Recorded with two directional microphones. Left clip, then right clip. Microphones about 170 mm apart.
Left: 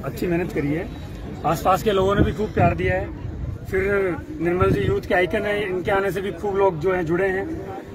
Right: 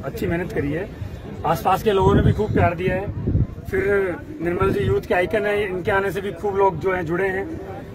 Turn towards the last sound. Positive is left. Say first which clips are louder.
# left 1 dB
turn(degrees=-5)  # may be behind; listen again after turning